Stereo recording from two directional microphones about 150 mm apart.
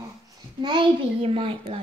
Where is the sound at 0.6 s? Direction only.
30° right (ahead or behind).